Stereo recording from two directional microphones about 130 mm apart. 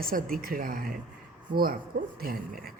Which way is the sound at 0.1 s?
90° right.